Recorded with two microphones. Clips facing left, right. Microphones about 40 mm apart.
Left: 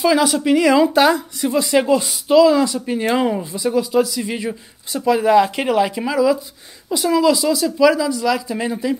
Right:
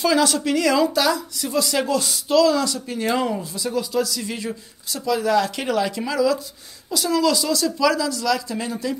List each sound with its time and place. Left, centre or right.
0.0 s speech: centre
0.9 s speech: left